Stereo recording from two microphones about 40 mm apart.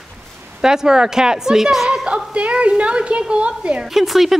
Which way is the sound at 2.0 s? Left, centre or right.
Right.